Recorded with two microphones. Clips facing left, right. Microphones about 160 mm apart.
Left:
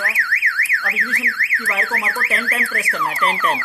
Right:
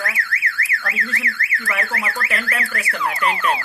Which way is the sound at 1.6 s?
25° left (ahead or behind).